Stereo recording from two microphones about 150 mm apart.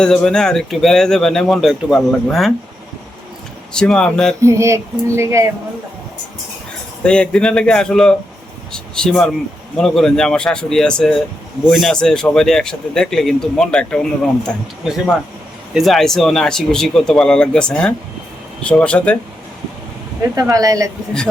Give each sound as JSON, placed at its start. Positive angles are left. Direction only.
{"t": 0.0, "sound": "speech", "side_deg": 5}
{"t": 3.7, "sound": "speech", "side_deg": 5}
{"t": 4.4, "sound": "speech", "side_deg": -20}
{"t": 7.0, "sound": "speech", "side_deg": 5}
{"t": 20.3, "sound": "speech", "side_deg": -25}